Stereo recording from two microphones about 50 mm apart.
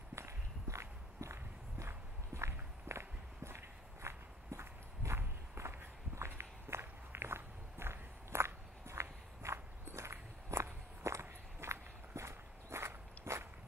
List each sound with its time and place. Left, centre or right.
0.1 s walk: right